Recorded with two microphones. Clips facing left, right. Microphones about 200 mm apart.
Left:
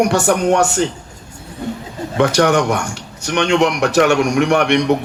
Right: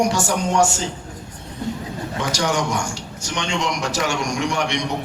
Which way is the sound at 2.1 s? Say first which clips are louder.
Left 10 dB; 60° left (ahead or behind).